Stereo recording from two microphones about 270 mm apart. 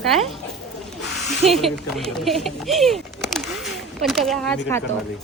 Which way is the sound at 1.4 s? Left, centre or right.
Centre.